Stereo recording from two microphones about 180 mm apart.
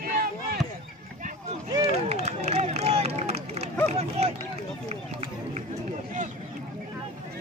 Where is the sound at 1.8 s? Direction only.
35° right (ahead or behind).